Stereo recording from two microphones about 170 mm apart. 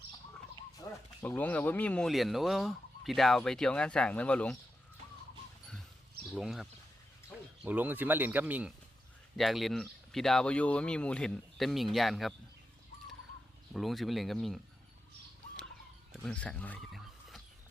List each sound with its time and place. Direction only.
0.9 s a sound: 15° left (ahead or behind)
1.2 s fowl: 10° left (ahead or behind)
6.3 s fowl: centre (ahead or behind)
7.6 s speech: 10° right (ahead or behind)
9.3 s fowl: centre (ahead or behind)
13.7 s fowl: centre (ahead or behind)
16.2 s a sound: 5° left (ahead or behind)